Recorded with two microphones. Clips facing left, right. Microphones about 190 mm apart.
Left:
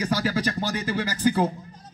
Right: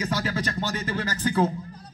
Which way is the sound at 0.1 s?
10° left (ahead or behind).